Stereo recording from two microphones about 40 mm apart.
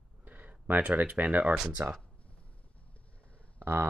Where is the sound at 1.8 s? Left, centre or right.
Right.